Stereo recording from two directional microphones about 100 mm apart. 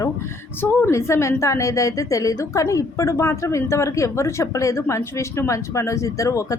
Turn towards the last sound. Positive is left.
turn(degrees=35)  # may be behind; listen again after turning